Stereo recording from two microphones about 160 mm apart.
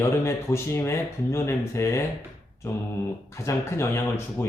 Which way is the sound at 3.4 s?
15° left (ahead or behind).